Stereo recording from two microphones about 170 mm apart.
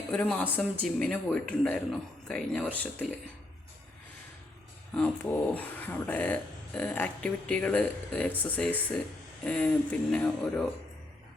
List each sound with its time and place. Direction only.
0.1 s speech: 10° left (ahead or behind)
4.9 s speech: 10° left (ahead or behind)